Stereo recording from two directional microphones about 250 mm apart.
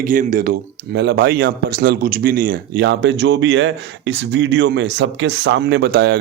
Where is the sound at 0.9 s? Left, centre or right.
Right.